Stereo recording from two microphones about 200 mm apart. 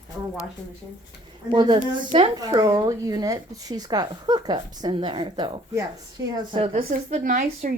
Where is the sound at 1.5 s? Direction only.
25° right (ahead or behind).